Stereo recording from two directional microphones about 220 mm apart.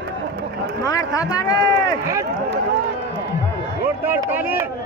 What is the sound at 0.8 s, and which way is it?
Speech, 15° left (ahead or behind).